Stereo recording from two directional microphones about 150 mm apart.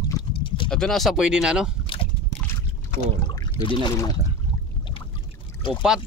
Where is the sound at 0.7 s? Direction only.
5° left (ahead or behind).